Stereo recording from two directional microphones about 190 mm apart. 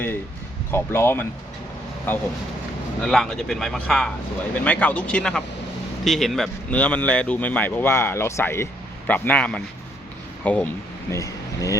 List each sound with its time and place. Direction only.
0.7 s speech: 10° left (ahead or behind)